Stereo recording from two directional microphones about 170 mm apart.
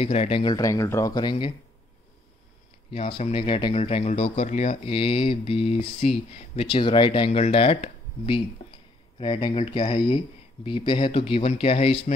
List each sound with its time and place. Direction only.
0.0 s speech: 35° left (ahead or behind)
2.9 s speech: 35° left (ahead or behind)